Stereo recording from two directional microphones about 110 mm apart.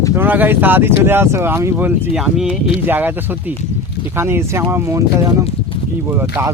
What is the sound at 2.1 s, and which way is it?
Speech, 5° right (ahead or behind).